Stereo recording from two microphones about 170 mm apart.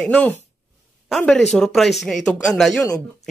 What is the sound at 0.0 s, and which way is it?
Speech, 10° left (ahead or behind).